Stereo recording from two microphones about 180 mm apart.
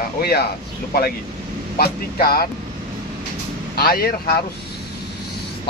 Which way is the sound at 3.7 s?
60° left (ahead or behind).